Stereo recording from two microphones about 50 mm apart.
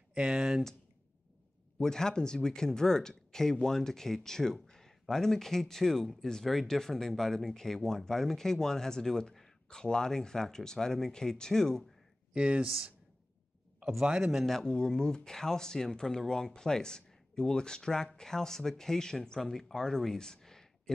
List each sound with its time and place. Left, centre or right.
0.1 s speech: centre
1.8 s speech: centre
12.4 s speech: right
13.9 s speech: centre
14.4 s speech: centre